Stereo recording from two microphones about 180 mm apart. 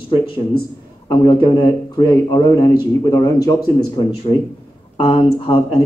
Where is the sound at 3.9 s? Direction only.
30° left (ahead or behind).